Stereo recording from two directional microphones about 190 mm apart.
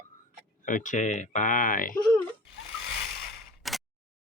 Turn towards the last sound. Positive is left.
turn(degrees=0)  # may be behind; listen again after turning